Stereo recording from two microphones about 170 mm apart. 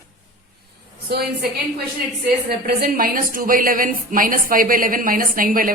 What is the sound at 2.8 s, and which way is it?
Speech, 60° right (ahead or behind).